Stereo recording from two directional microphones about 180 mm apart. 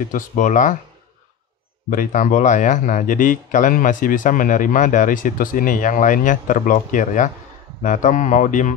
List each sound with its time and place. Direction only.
0.0 s speech: 45° left (ahead or behind)
1.9 s speech: 45° left (ahead or behind)